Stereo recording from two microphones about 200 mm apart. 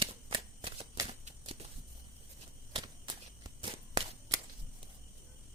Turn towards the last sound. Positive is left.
turn(degrees=-20)  # may be behind; listen again after turning